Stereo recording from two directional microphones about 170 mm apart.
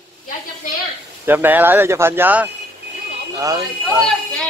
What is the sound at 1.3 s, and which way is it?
Speech, 10° right (ahead or behind).